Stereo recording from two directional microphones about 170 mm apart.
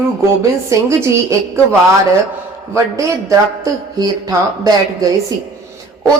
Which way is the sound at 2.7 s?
20° right (ahead or behind).